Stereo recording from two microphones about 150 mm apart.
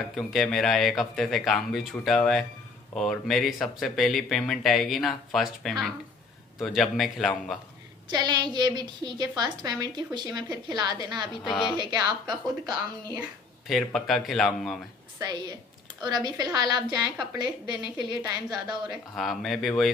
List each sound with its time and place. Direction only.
0.1 s speech: centre (ahead or behind)
8.1 s a woman's voice: 30° right (ahead or behind)
11.4 s speech: centre (ahead or behind)
11.7 s speech: 30° right (ahead or behind)
13.7 s speech: centre (ahead or behind)
15.1 s a woman's voice: 25° right (ahead or behind)
19.1 s speech: centre (ahead or behind)